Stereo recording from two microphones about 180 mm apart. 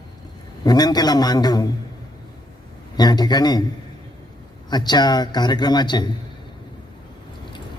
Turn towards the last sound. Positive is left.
turn(degrees=25)  # may be behind; listen again after turning